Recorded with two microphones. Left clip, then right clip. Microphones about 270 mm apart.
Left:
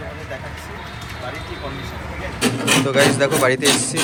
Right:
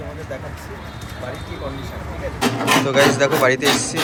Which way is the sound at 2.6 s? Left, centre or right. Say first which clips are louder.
Right 1 dB; centre.